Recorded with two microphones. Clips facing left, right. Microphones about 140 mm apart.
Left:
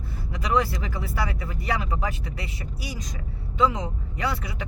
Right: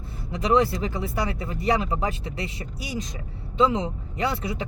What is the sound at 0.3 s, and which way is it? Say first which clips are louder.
Speech: right 4 dB; 25° right (ahead or behind).